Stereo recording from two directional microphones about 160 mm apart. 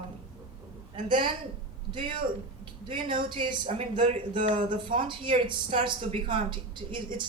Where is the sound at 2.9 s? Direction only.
30° right (ahead or behind).